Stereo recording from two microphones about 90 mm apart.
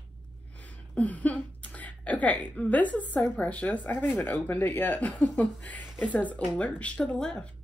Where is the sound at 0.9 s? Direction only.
15° left (ahead or behind).